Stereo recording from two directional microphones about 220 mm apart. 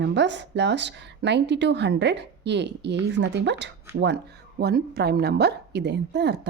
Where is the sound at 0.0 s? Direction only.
55° right (ahead or behind).